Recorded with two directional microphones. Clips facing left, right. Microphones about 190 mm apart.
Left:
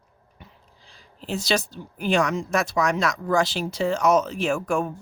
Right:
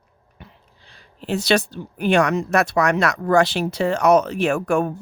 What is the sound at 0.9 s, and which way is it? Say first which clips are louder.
Speech: right 5 dB; 65° right (ahead or behind).